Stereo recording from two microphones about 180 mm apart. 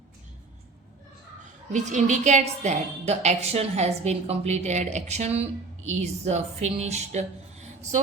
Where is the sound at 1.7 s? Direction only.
40° right (ahead or behind).